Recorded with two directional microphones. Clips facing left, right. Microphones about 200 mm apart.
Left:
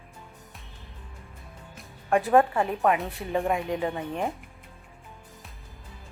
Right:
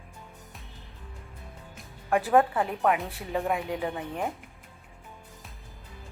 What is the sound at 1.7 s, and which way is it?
Music, centre (ahead or behind).